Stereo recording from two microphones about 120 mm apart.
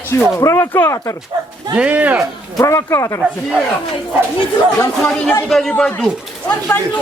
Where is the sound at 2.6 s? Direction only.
25° left (ahead or behind).